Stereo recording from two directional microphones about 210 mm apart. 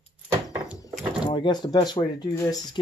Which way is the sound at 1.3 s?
20° left (ahead or behind).